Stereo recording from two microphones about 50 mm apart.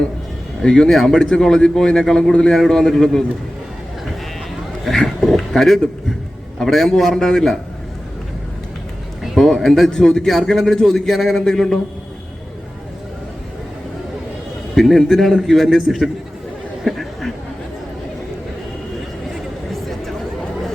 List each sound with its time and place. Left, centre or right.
0.6 s speech: centre
4.9 s speech: centre
9.4 s a man's voice: centre
14.8 s a man's voice: centre
16.8 s a sound: centre
19.3 s a sound: centre